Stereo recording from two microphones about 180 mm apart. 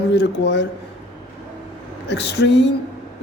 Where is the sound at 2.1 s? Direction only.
75° left (ahead or behind).